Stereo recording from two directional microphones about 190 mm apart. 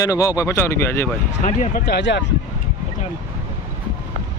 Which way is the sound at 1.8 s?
65° left (ahead or behind).